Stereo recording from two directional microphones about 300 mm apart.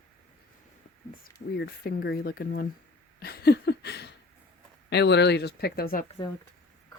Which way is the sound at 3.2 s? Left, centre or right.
Left.